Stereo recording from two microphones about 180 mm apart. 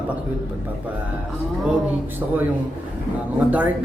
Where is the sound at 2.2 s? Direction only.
10° right (ahead or behind).